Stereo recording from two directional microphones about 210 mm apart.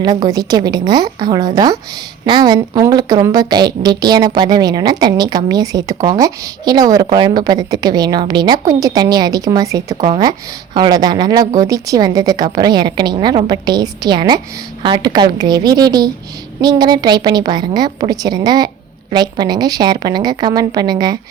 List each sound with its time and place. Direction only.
0.0 s a woman's voice: 20° right (ahead or behind)